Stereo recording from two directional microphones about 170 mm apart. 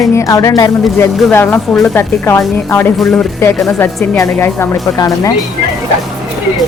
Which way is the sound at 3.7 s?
15° left (ahead or behind).